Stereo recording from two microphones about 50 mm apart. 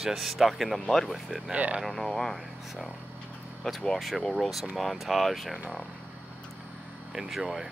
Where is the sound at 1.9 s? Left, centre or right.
Centre.